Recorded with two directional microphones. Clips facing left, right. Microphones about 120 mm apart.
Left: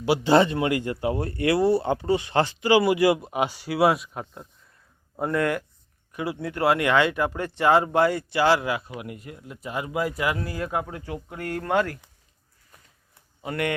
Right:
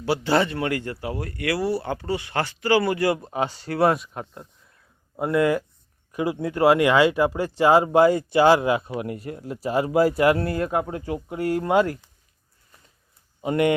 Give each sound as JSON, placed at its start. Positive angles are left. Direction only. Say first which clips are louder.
{"t": 0.0, "sound": "speech", "louder": "left 3 dB", "side_deg": 20}
{"t": 6.1, "sound": "speech", "louder": "right 4 dB", "side_deg": -20}
{"t": 13.4, "sound": "speech", "louder": "right 7 dB", "side_deg": -20}